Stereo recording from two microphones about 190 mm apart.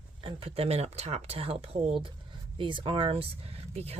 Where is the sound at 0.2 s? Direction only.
30° right (ahead or behind).